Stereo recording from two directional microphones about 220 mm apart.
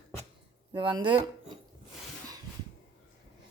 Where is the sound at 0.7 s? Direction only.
20° right (ahead or behind).